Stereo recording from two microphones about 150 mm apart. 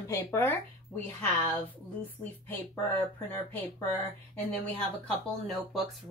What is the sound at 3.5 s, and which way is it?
Speech, 15° left (ahead or behind).